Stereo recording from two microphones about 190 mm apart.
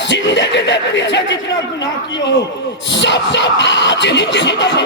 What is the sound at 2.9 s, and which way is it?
Speech, 70° left (ahead or behind).